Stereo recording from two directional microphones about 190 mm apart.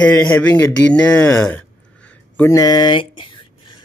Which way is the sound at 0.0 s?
5° left (ahead or behind).